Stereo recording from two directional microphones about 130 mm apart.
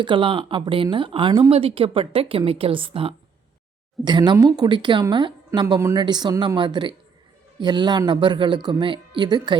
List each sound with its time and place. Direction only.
0.0 s speech: 40° right (ahead or behind)
4.0 s speech: 35° right (ahead or behind)